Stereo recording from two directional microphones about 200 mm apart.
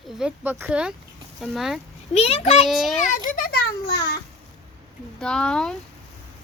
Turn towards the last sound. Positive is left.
turn(degrees=5)  # may be behind; listen again after turning